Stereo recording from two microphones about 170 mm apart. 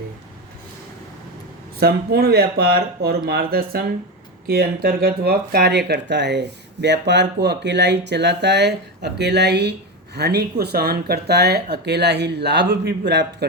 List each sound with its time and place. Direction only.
1.8 s speech: 65° right (ahead or behind); by 13.0 s 80° right